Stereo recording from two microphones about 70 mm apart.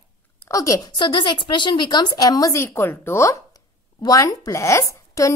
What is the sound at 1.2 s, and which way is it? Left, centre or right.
A woman's voice, left.